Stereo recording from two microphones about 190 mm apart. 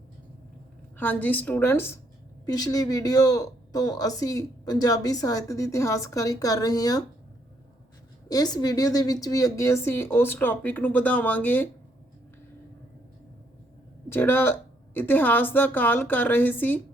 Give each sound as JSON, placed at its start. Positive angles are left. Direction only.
{"t": 0.9, "sound": "a woman's voice", "side_deg": 10}
{"t": 8.3, "sound": "a woman's voice", "side_deg": 20}
{"t": 14.1, "sound": "a woman's voice", "side_deg": 10}